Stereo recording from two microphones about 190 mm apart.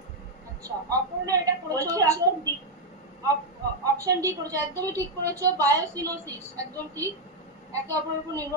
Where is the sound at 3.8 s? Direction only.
15° right (ahead or behind).